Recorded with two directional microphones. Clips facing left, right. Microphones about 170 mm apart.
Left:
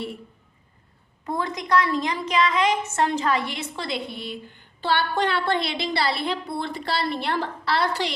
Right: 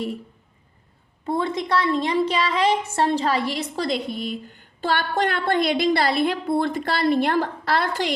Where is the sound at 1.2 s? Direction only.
25° right (ahead or behind).